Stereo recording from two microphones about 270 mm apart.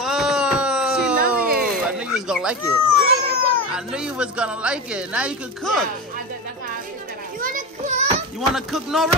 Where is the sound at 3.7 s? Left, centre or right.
Centre.